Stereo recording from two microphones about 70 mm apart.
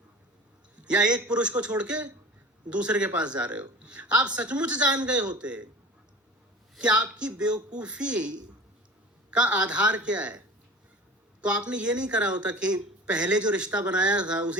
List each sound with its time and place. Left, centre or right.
0.9 s speech: centre
6.7 s speech: centre
9.3 s speech: centre